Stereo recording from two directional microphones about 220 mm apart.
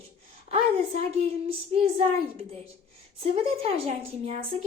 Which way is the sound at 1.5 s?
25° right (ahead or behind).